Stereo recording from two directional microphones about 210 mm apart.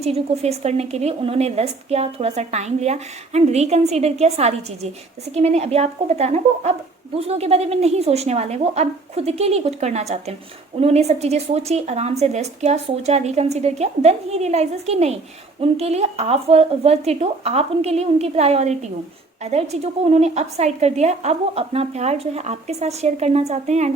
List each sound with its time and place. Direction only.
0.0 s a woman's voice: 30° right (ahead or behind)